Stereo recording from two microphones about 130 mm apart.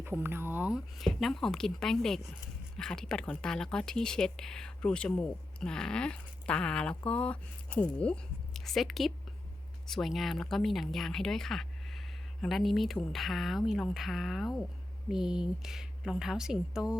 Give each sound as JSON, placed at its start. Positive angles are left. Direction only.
{"t": 0.0, "sound": "speech", "side_deg": -15}
{"t": 0.9, "sound": "speech", "side_deg": 0}